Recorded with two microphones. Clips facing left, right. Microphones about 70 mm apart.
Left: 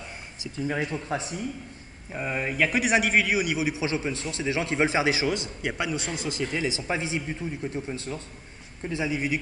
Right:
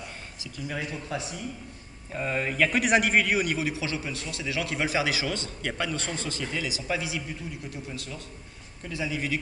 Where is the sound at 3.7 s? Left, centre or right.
Left.